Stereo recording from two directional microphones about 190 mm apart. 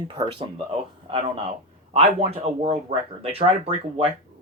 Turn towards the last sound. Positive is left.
turn(degrees=-30)  # may be behind; listen again after turning